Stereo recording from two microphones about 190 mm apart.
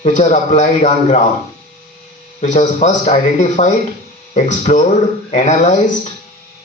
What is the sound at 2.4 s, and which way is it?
A man's voice, 40° left (ahead or behind).